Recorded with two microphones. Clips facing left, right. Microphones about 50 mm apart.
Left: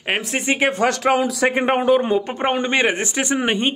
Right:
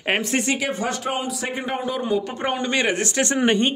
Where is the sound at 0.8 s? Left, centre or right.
Left.